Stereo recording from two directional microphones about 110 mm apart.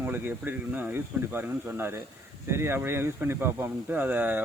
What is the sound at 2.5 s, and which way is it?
Speech, 20° right (ahead or behind).